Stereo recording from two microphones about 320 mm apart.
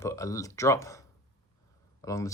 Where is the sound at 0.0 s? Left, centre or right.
Centre.